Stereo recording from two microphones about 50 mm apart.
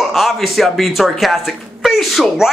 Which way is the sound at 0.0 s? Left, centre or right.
Centre.